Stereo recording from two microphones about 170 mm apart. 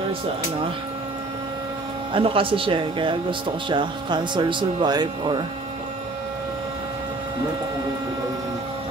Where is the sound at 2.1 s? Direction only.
30° right (ahead or behind).